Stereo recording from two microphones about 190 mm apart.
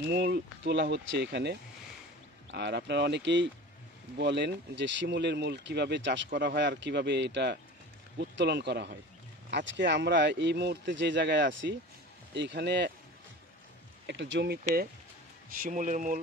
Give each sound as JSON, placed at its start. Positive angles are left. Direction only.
{"t": 0.0, "sound": "speech", "side_deg": -60}
{"t": 14.0, "sound": "speech", "side_deg": -70}
{"t": 15.6, "sound": "speech", "side_deg": -40}